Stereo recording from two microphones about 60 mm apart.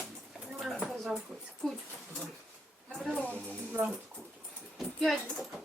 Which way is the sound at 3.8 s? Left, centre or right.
Right.